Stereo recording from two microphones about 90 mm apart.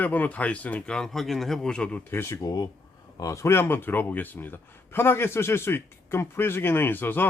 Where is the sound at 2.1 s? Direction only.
25° left (ahead or behind).